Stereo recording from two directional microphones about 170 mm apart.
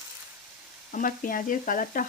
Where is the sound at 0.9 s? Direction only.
55° left (ahead or behind).